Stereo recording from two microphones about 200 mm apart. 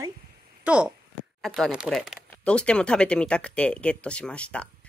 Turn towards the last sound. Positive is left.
turn(degrees=5)  # may be behind; listen again after turning